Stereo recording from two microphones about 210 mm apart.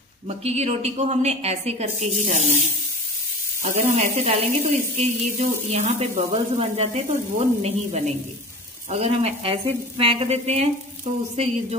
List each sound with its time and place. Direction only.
0.4 s speech: 30° right (ahead or behind)
3.6 s speech: 35° right (ahead or behind)